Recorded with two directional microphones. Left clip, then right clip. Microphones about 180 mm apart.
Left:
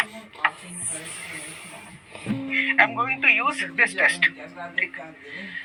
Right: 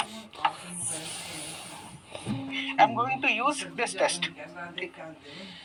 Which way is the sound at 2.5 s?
45° right (ahead or behind).